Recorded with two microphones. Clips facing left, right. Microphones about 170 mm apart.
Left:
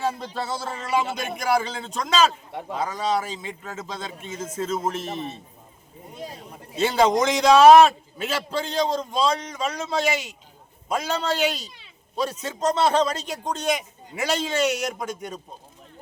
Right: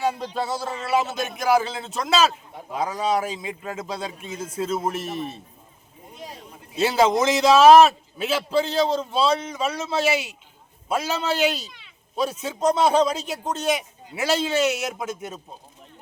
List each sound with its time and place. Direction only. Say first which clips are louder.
0.1 s a man's voice: right 3 dB; 10° right (ahead or behind)
6.7 s a man's voice: even; 5° right (ahead or behind)